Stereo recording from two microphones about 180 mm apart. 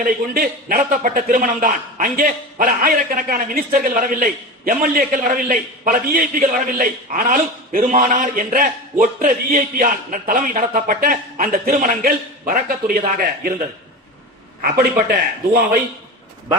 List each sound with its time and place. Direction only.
0.0 s a man's voice: 55° right (ahead or behind)
14.6 s speech: 60° right (ahead or behind)